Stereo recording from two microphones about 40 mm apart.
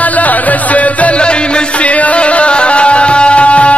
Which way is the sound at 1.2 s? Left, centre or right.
Left.